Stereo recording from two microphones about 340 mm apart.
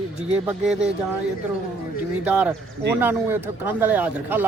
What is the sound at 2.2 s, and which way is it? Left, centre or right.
Speech, centre.